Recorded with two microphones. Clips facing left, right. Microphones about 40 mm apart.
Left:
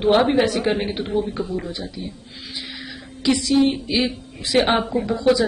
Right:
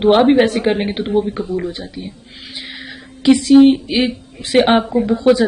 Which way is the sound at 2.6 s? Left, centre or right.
Right.